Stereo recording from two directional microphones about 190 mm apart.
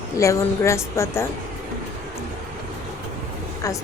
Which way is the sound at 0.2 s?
15° left (ahead or behind).